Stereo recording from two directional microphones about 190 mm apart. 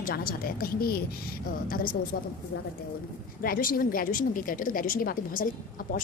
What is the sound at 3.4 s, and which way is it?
A woman's voice, 50° left (ahead or behind).